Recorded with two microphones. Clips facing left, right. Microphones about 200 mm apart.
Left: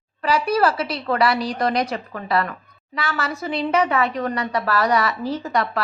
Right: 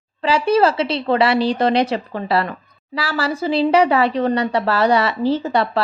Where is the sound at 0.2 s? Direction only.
25° right (ahead or behind).